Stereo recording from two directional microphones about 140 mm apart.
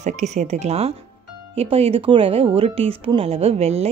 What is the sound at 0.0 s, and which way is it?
Speech, 55° right (ahead or behind).